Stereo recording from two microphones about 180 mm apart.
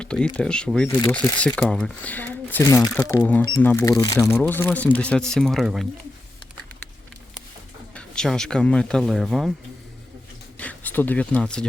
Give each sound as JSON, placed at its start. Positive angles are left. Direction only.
{"t": 0.0, "sound": "speech", "side_deg": 5}
{"t": 7.9, "sound": "speech", "side_deg": 5}
{"t": 10.6, "sound": "speech", "side_deg": 10}